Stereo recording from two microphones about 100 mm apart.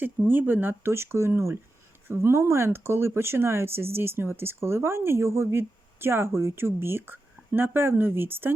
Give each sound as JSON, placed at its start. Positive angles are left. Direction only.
{"t": 0.3, "sound": "speech", "side_deg": -20}